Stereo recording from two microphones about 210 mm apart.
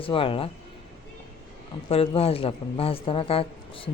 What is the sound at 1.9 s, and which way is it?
Speech, 30° left (ahead or behind).